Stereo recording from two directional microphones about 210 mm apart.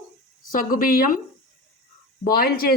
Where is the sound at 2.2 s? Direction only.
45° left (ahead or behind).